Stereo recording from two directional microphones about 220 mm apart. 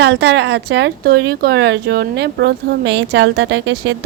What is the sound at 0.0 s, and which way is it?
A woman's voice, 50° right (ahead or behind).